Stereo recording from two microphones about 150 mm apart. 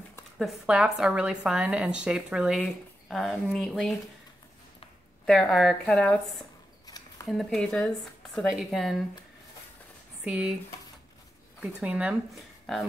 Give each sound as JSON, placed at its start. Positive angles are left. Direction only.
{"t": 0.4, "sound": "a woman's voice", "side_deg": -5}
{"t": 5.2, "sound": "a woman's voice", "side_deg": 5}
{"t": 10.2, "sound": "speech", "side_deg": -5}
{"t": 11.6, "sound": "a woman's voice", "side_deg": -10}